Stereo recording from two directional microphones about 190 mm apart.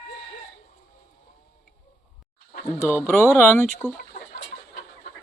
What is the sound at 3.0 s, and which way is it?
Speech, 10° left (ahead or behind).